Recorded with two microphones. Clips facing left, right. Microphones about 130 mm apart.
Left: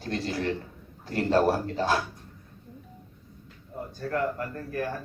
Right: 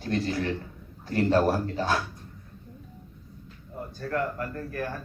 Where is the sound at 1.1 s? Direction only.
30° left (ahead or behind).